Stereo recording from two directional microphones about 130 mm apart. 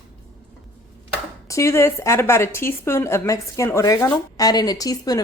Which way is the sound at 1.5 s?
20° left (ahead or behind).